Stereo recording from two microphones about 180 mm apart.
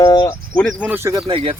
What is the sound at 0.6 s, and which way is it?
Speech, 5° left (ahead or behind).